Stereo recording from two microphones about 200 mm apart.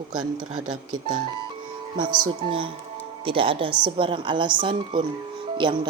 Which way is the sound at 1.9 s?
25° right (ahead or behind).